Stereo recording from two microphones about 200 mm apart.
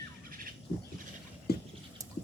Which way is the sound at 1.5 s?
50° left (ahead or behind).